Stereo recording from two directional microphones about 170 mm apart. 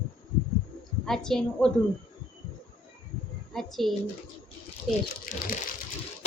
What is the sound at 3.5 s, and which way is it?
Speech, centre (ahead or behind).